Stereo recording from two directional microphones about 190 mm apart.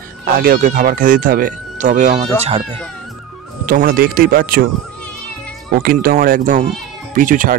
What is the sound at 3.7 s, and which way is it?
Speech, 50° right (ahead or behind).